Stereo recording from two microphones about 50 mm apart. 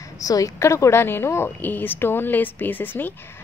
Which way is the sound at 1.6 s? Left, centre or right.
Left.